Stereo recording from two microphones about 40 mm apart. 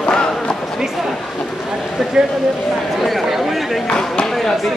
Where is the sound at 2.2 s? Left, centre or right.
Centre.